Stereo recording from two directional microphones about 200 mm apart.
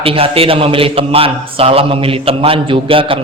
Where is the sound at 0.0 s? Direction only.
30° right (ahead or behind).